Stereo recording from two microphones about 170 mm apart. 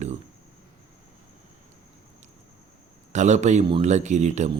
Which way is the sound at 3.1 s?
45° right (ahead or behind).